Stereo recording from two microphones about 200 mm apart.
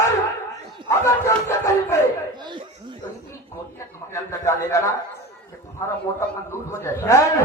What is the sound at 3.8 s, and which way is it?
A man's voice, 15° left (ahead or behind).